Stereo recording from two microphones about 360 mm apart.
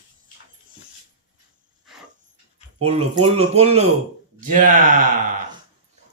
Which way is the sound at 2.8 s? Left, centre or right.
Centre.